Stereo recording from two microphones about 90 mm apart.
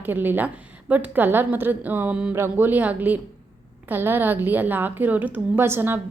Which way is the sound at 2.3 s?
25° right (ahead or behind).